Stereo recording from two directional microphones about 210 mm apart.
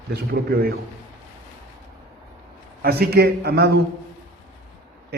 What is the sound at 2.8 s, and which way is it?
A man's voice, 45° right (ahead or behind).